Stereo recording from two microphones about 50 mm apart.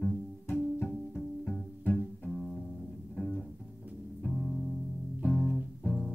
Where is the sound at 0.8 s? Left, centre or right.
Left.